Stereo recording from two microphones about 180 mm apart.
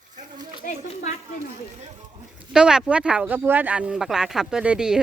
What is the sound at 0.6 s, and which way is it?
Speech, 50° left (ahead or behind).